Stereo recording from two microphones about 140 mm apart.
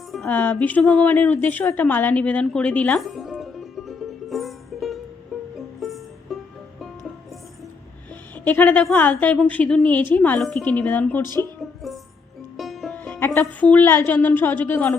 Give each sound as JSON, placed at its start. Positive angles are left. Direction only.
{"t": 0.3, "sound": "a woman's voice", "side_deg": 10}
{"t": 3.0, "sound": "music", "side_deg": 0}
{"t": 8.4, "sound": "a woman's voice", "side_deg": 10}
{"t": 11.6, "sound": "music", "side_deg": 0}
{"t": 13.0, "sound": "music", "side_deg": 15}
{"t": 13.4, "sound": "a woman's voice", "side_deg": 10}